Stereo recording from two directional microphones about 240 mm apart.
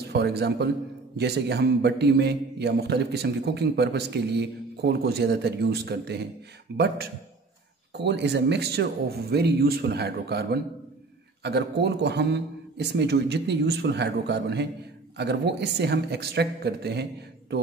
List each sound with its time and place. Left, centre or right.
0.1 s a man's voice: right
7.9 s a man's voice: right